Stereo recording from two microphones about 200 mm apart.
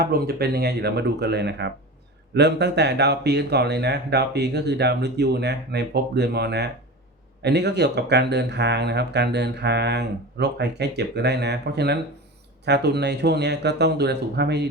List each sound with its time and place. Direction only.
0.0 s speech: 50° right (ahead or behind)